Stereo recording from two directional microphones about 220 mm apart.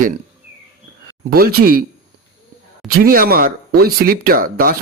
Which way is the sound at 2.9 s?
40° right (ahead or behind).